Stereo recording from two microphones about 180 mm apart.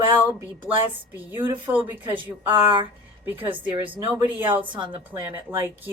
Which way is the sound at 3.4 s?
25° right (ahead or behind).